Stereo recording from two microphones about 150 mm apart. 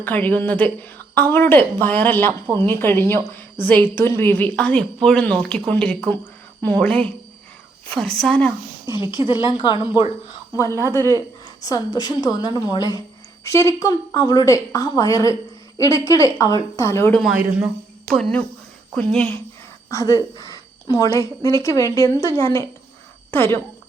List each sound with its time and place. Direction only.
0.0 s a woman's voice: 10° left (ahead or behind)
9.0 s speech: 30° left (ahead or behind)
11.6 s a woman's voice: 25° left (ahead or behind)
17.1 s a woman's voice: centre (ahead or behind)
19.9 s a woman's voice: 20° left (ahead or behind)